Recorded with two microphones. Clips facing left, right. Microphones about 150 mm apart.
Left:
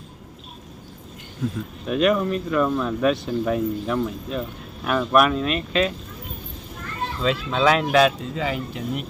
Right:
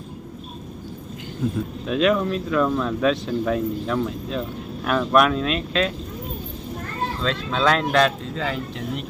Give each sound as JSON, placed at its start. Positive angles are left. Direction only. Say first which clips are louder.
{"t": 1.9, "sound": "speech", "louder": "even", "side_deg": 0}
{"t": 7.2, "sound": "speech", "louder": "left 3 dB", "side_deg": 5}